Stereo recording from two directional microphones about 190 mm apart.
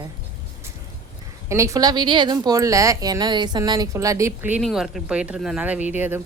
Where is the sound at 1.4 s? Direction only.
15° right (ahead or behind).